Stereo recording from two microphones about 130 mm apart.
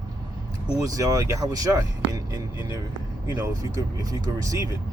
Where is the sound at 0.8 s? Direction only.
25° right (ahead or behind).